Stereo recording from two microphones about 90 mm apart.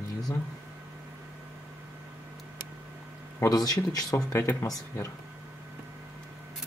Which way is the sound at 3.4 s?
45° left (ahead or behind).